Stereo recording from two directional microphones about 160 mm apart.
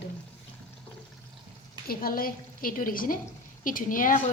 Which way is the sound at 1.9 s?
65° left (ahead or behind).